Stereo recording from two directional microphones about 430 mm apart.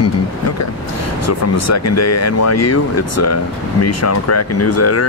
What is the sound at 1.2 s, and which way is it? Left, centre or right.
Speech, left.